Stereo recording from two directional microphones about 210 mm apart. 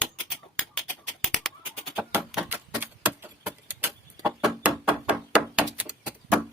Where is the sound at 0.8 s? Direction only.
5° left (ahead or behind).